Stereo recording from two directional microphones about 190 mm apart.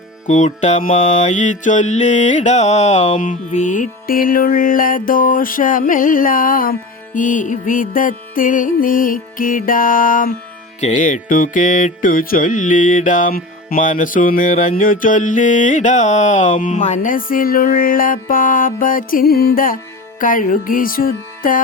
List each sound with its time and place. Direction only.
0.3 s mantra: 40° left (ahead or behind)